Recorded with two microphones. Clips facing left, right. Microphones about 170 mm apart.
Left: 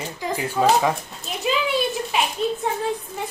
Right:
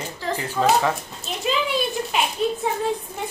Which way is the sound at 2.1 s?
Centre (ahead or behind).